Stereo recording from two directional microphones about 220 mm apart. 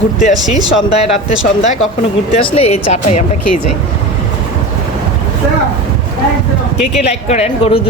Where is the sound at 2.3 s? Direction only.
25° left (ahead or behind).